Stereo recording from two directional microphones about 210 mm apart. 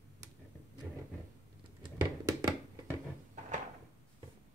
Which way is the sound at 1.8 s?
20° right (ahead or behind).